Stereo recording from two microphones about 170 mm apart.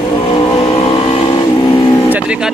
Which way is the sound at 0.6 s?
30° left (ahead or behind).